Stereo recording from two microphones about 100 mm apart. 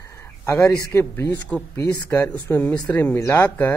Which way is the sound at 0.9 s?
25° left (ahead or behind).